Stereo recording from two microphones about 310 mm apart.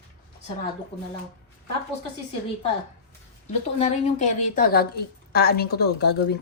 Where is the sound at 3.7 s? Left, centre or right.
Left.